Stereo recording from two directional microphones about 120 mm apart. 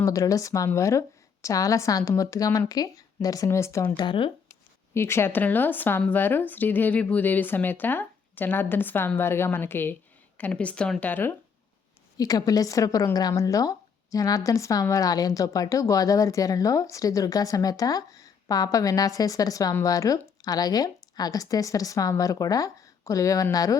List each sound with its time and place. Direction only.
0.0 s speech: 25° left (ahead or behind)
3.9 s speech: 45° left (ahead or behind)
4.9 s speech: 20° left (ahead or behind)
12.1 s a woman's voice: 30° left (ahead or behind)